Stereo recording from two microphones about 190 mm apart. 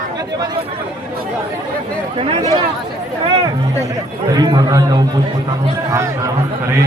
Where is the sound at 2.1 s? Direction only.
30° right (ahead or behind).